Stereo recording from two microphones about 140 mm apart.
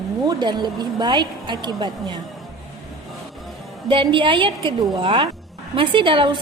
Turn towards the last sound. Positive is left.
turn(degrees=-35)  # may be behind; listen again after turning